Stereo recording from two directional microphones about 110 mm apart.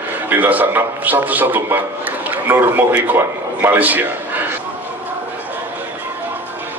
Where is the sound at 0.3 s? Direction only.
15° right (ahead or behind).